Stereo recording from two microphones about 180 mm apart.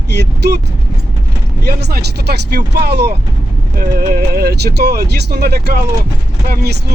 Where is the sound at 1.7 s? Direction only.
60° right (ahead or behind).